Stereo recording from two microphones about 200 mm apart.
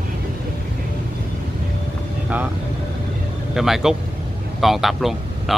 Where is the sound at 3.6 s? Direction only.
Centre (ahead or behind).